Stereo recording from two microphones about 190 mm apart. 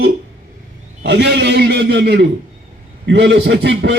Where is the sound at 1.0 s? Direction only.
60° right (ahead or behind).